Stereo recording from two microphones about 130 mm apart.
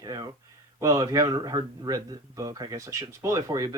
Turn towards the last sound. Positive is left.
turn(degrees=-25)  # may be behind; listen again after turning